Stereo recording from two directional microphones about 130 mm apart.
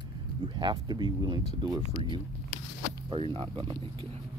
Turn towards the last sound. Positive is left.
turn(degrees=-45)  # may be behind; listen again after turning